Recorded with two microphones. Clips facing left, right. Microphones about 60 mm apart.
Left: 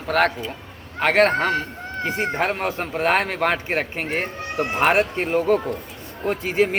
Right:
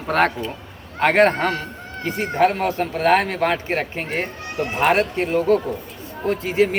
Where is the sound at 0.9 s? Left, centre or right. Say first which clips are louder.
Right 2 dB; centre.